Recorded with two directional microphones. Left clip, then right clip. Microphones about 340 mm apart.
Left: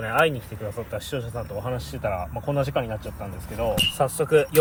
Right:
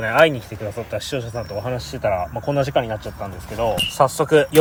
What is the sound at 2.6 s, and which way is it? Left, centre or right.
Speech, right.